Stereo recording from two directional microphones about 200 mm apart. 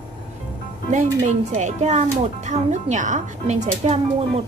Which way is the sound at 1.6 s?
35° right (ahead or behind).